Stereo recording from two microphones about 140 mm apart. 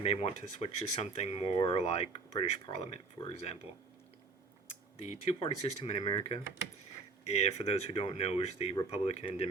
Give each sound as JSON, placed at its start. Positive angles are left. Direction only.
{"t": 0.0, "sound": "speech", "side_deg": 50}
{"t": 4.9, "sound": "speech", "side_deg": 45}
{"t": 6.0, "sound": "speech", "side_deg": 35}
{"t": 7.3, "sound": "speech", "side_deg": 50}